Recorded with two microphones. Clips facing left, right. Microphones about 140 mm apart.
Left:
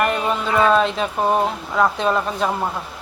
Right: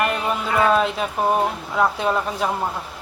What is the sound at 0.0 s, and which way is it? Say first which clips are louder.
Speech: left 2 dB; 5° right (ahead or behind).